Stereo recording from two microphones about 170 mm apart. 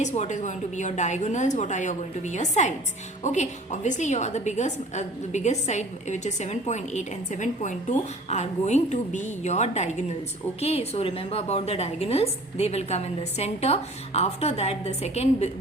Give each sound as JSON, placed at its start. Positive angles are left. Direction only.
{"t": 0.0, "sound": "a woman's voice", "side_deg": 45}